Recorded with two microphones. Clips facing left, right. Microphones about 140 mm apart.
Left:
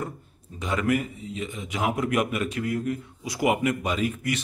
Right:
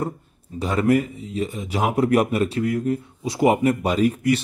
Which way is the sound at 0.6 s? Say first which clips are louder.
Right 6 dB; 35° right (ahead or behind).